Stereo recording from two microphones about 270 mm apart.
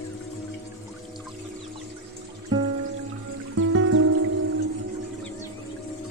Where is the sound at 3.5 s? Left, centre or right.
Right.